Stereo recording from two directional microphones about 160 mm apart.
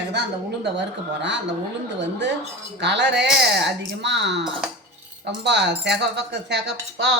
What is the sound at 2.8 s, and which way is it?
Speech, 90° right.